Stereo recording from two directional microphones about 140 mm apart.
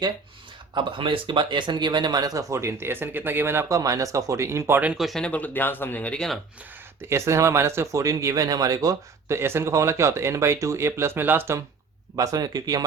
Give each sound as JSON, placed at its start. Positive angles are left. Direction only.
{"t": 0.7, "sound": "speech", "side_deg": -35}
{"t": 7.1, "sound": "speech", "side_deg": -20}